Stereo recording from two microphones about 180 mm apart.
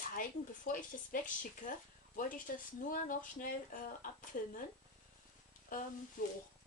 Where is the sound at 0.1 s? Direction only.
50° left (ahead or behind).